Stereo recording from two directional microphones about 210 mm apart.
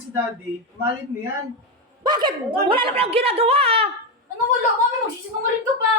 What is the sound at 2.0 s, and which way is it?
A woman's voice, 20° right (ahead or behind).